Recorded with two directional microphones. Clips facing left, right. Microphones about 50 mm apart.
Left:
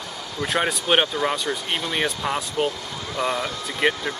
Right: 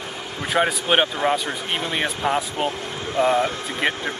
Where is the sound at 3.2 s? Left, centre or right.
Right.